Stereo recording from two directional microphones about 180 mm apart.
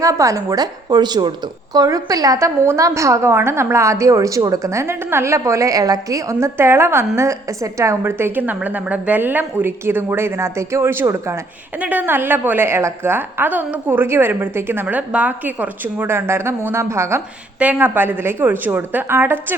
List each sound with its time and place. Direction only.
0.0 s a woman's voice: 20° right (ahead or behind)